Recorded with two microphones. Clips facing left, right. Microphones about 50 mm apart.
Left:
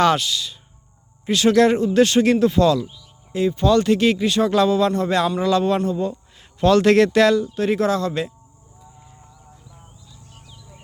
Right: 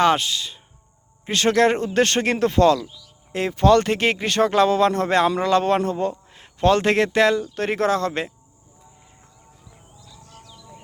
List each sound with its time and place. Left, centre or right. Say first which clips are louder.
0.0 s a man's voice: left 1 dB; right
3.3 s a man's voice: right 1 dB; right
6.4 s speech: left 2 dB; right
7.5 s a man's voice: left 1 dB; right